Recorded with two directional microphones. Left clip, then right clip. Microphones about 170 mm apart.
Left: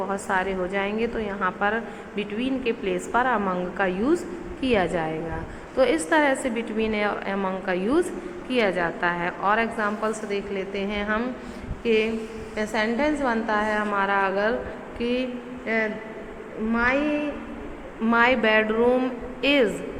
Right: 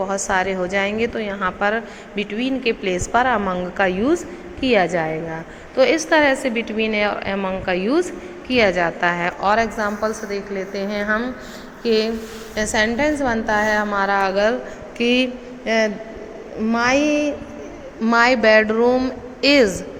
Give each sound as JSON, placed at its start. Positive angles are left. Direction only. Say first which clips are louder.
{"t": 0.0, "sound": "a woman's voice", "louder": "right 5 dB", "side_deg": -30}
{"t": 10.2, "sound": "a woman's voice", "louder": "right 3 dB", "side_deg": -25}
{"t": 12.5, "sound": "a woman's voice", "louder": "right 6 dB", "side_deg": -35}
{"t": 16.7, "sound": "a sound", "louder": "right 6 dB", "side_deg": -65}
{"t": 18.0, "sound": "a woman's voice", "louder": "right 5 dB", "side_deg": -40}